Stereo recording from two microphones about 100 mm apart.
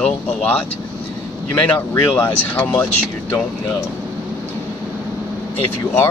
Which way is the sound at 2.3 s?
15° left (ahead or behind).